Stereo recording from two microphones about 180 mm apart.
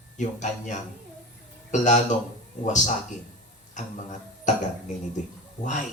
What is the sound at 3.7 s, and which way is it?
Speech, 40° left (ahead or behind).